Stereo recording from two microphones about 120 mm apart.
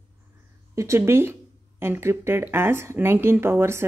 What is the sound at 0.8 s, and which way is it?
Speech, 20° right (ahead or behind).